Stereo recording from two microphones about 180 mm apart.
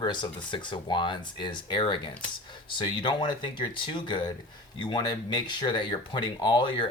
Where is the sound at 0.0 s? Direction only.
25° left (ahead or behind).